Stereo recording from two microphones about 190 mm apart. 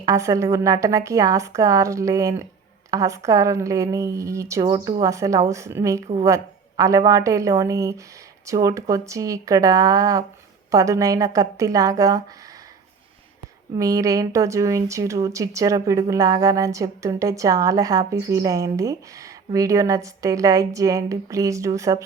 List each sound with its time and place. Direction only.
0.0 s speech: 15° right (ahead or behind)
13.7 s speech: 15° right (ahead or behind)